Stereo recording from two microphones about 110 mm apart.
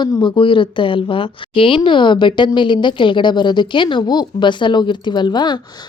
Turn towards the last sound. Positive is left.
turn(degrees=40)  # may be behind; listen again after turning